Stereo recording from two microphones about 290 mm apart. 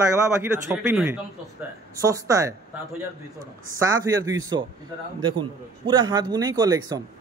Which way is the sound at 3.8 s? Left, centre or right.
Centre.